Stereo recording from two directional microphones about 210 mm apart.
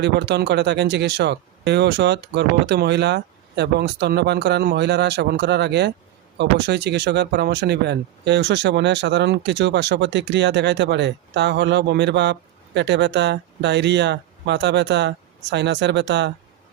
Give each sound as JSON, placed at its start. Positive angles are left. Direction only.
{"t": 0.0, "sound": "speech", "side_deg": -55}